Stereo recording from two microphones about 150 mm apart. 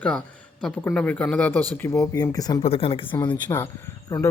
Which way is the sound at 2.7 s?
35° left (ahead or behind).